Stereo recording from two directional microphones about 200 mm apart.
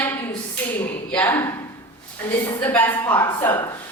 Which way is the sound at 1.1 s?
10° left (ahead or behind).